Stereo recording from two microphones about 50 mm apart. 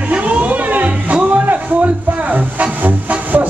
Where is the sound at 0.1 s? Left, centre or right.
Right.